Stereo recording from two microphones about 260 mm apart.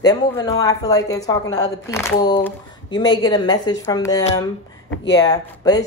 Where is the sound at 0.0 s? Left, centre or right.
Centre.